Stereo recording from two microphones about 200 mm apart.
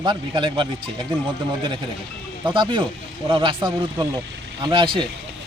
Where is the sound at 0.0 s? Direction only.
20° right (ahead or behind).